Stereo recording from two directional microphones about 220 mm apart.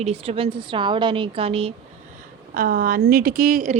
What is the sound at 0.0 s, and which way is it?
A woman's voice, 30° right (ahead or behind).